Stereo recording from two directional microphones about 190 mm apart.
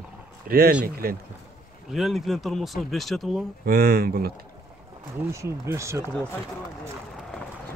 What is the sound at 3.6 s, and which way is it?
Speech, 50° right (ahead or behind).